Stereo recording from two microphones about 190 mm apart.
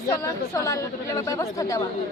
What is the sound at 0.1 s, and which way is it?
A woman's voice, 15° left (ahead or behind).